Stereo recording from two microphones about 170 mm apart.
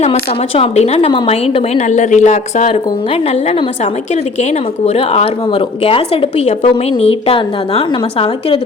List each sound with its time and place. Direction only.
0.0 s speech: 35° left (ahead or behind)
4.9 s speech: 35° left (ahead or behind)